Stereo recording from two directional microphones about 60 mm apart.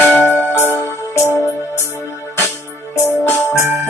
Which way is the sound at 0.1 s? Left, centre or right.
Left.